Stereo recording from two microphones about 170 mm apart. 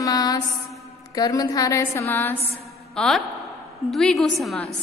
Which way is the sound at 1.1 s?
20° left (ahead or behind).